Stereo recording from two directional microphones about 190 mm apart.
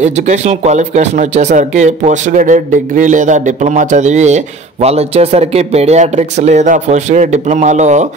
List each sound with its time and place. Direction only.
0.0 s speech: 40° right (ahead or behind)